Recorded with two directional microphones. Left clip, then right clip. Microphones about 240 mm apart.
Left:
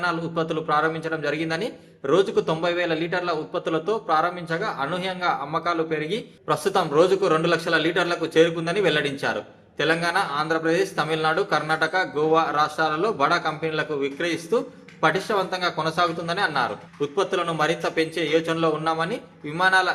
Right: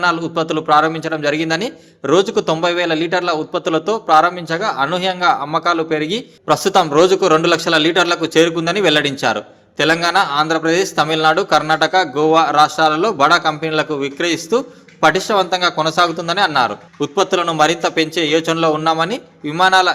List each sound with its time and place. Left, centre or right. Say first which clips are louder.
0.0 s a man's voice: right 8 dB; right